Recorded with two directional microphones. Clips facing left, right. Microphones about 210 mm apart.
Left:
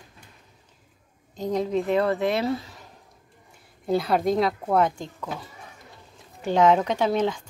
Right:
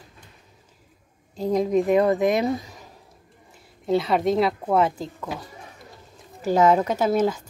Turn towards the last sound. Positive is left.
turn(degrees=-5)  # may be behind; listen again after turning